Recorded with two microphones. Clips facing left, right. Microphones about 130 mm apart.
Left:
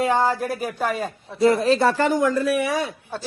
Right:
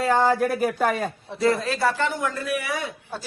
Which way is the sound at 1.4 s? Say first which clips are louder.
Left 5 dB; 25° left (ahead or behind).